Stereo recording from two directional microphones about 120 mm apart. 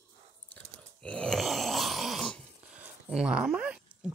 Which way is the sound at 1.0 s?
10° left (ahead or behind).